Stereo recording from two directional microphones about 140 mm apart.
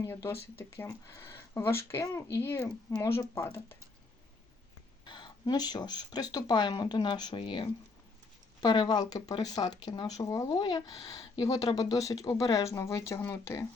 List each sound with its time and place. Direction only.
0.0 s speech: 20° left (ahead or behind)
5.0 s speech: 35° left (ahead or behind)